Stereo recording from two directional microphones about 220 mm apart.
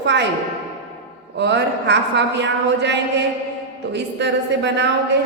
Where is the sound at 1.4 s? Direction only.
50° right (ahead or behind).